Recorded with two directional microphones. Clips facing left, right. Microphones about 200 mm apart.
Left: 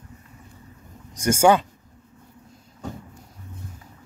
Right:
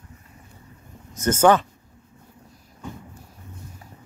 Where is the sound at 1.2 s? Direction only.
10° left (ahead or behind).